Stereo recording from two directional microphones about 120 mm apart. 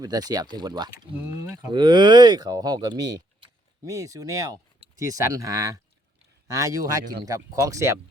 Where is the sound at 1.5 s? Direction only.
35° right (ahead or behind).